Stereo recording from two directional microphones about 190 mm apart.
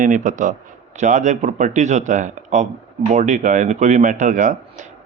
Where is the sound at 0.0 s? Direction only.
40° right (ahead or behind).